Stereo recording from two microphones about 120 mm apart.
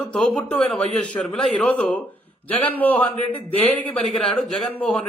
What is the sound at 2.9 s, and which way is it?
Speech, 50° left (ahead or behind).